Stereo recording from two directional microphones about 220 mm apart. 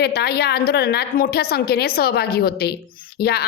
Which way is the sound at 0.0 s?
45° left (ahead or behind).